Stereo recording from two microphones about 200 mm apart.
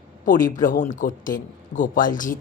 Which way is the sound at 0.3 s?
40° left (ahead or behind).